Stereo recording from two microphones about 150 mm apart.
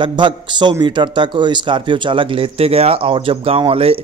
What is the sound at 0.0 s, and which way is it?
Speech, 30° right (ahead or behind).